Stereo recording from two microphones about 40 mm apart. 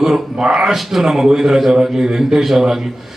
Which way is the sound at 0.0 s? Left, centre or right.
Centre.